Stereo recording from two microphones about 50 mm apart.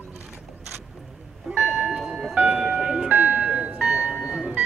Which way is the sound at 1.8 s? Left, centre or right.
Centre.